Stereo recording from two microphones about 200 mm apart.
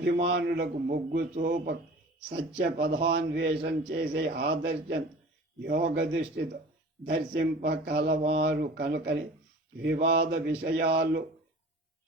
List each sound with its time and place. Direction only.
0.3 s speech: 55° right (ahead or behind)
2.8 s a man's voice: 55° right (ahead or behind)